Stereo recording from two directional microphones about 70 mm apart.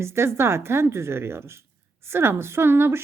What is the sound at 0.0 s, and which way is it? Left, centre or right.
A woman's voice, right.